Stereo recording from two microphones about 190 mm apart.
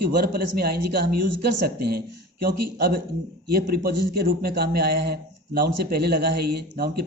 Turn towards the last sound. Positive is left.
turn(degrees=-50)  # may be behind; listen again after turning